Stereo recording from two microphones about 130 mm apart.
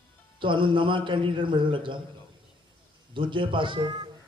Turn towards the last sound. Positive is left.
turn(degrees=-35)  # may be behind; listen again after turning